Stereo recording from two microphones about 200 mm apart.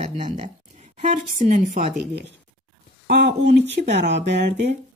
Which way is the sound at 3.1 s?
55° right (ahead or behind).